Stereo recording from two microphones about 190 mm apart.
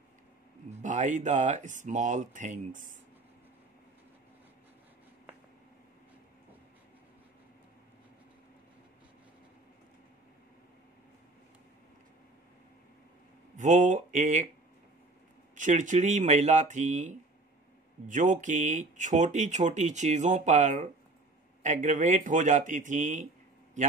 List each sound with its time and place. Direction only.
0.7 s speech: 40° right (ahead or behind)
13.6 s speech: 40° right (ahead or behind)
15.5 s speech: 40° right (ahead or behind)